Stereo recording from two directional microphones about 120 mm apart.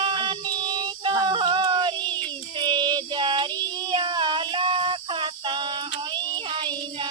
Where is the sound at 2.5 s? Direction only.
40° right (ahead or behind).